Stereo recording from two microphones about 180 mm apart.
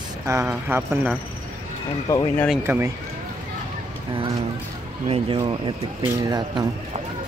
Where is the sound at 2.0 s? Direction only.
20° left (ahead or behind).